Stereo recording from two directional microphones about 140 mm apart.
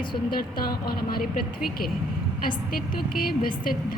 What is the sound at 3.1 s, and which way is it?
Speech, 90° left.